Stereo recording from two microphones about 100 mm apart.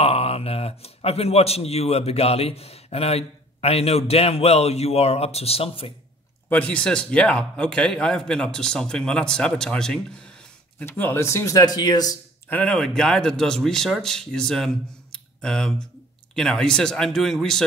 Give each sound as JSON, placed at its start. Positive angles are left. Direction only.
{"t": 0.0, "sound": "a man's voice", "side_deg": 80}
{"t": 6.5, "sound": "a man's voice", "side_deg": 15}
{"t": 10.9, "sound": "speech", "side_deg": 25}
{"t": 12.6, "sound": "speech", "side_deg": 5}
{"t": 15.1, "sound": "a sound", "side_deg": 5}
{"t": 16.3, "sound": "speech", "side_deg": 5}